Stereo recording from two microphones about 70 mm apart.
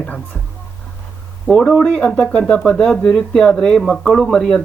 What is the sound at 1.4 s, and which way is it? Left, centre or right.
Speech, centre.